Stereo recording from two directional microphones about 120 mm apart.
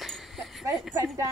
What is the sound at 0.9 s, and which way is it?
Speech, 25° right (ahead or behind).